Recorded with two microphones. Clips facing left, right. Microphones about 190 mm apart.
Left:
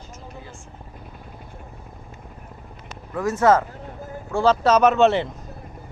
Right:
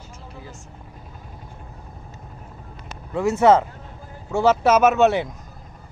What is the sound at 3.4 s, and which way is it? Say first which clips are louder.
Speech: right 2 dB; 25° right (ahead or behind).